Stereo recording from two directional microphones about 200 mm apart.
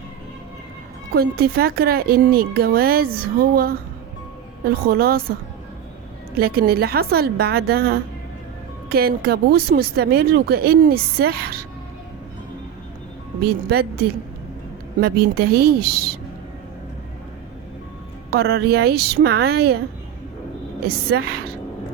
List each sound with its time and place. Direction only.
1.1 s speech: 50° right (ahead or behind)
4.9 s speech: 50° right (ahead or behind)
6.3 s speech: 50° right (ahead or behind)
13.4 s speech: 50° right (ahead or behind)
15.0 s speech: 50° right (ahead or behind)
18.3 s speech: 50° right (ahead or behind)
20.8 s speech: 55° right (ahead or behind)